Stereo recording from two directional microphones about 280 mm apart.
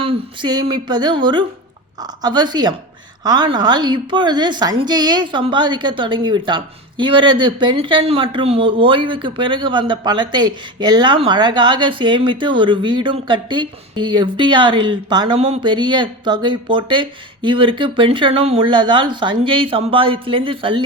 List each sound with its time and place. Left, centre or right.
0.0 s a woman's voice: centre